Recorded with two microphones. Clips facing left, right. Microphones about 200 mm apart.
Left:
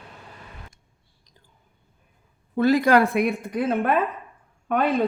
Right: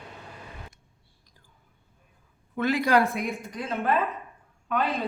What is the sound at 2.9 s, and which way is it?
A woman's voice, 70° left (ahead or behind).